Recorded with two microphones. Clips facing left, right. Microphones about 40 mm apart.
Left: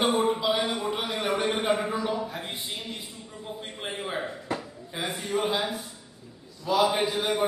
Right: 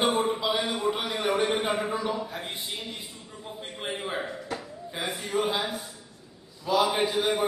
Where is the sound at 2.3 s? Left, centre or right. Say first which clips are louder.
Even; centre.